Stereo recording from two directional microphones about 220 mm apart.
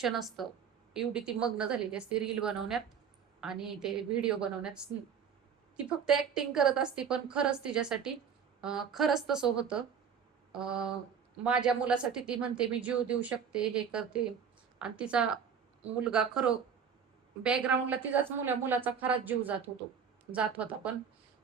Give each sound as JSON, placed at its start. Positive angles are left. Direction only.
{"t": 0.0, "sound": "speech", "side_deg": 0}
{"t": 6.1, "sound": "a woman's voice", "side_deg": 0}